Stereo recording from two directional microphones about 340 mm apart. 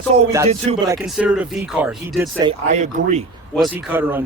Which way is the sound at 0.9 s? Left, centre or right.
Centre.